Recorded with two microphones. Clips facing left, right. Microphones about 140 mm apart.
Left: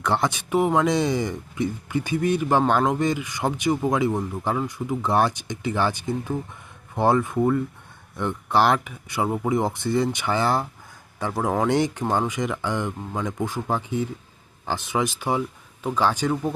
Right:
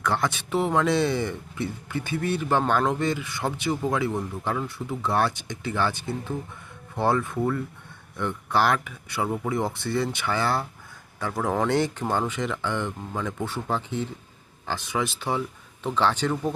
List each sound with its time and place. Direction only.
0.0 s speech: 20° left (ahead or behind)